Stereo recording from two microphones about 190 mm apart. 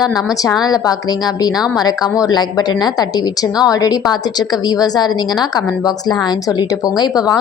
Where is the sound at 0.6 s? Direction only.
20° left (ahead or behind).